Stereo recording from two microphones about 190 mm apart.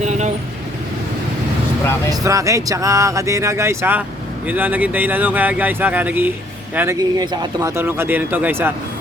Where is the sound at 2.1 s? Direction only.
15° right (ahead or behind).